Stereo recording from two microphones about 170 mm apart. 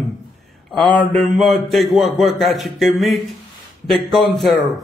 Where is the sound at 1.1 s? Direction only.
Centre (ahead or behind).